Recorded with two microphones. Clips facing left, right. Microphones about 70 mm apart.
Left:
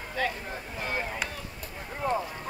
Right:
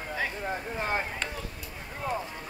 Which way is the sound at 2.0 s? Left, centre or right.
Centre.